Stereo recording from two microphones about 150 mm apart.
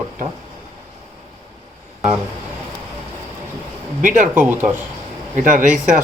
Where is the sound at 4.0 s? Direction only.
60° right (ahead or behind).